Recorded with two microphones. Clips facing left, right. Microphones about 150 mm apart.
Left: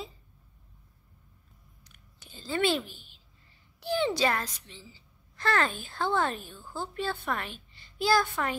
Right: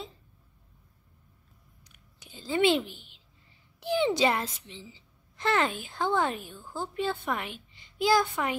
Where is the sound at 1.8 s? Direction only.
15° right (ahead or behind).